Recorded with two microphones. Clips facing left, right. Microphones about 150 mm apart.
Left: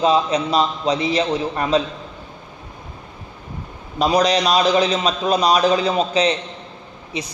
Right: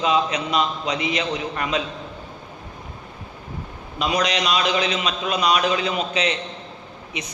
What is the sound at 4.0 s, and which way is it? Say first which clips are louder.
A man's voice: left 6 dB; 35° left (ahead or behind).